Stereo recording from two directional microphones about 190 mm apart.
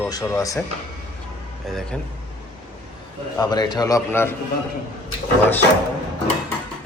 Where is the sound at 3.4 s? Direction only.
20° left (ahead or behind).